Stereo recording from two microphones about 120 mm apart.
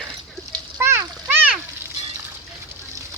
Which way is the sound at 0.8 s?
25° right (ahead or behind).